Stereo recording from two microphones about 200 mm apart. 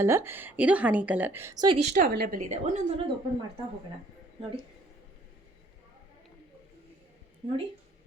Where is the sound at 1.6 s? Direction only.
30° right (ahead or behind).